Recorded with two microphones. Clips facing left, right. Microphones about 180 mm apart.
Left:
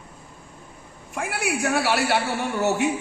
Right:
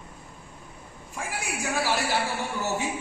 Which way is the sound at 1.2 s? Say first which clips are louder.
Left 7 dB; 70° left (ahead or behind).